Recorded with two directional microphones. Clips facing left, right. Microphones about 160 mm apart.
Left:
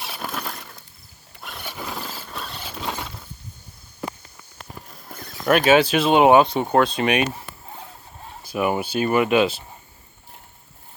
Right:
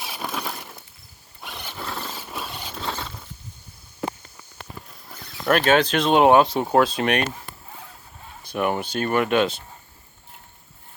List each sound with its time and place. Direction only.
0.0 s a sound: centre (ahead or behind)
1.4 s squeal: centre (ahead or behind)
2.2 s rodents: 5° right (ahead or behind)
5.1 s a sound: 45° left (ahead or behind)
5.5 s speech: 5° left (ahead or behind)
8.4 s speech: 5° left (ahead or behind)